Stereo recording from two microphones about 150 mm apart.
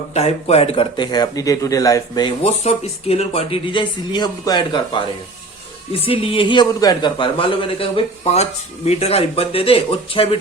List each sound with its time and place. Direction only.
0.1 s speech: 45° left (ahead or behind); by 2.3 s 25° left (ahead or behind)
2.4 s speech: 45° left (ahead or behind); by 4.8 s 30° left (ahead or behind)
5.9 s speech: 35° left (ahead or behind)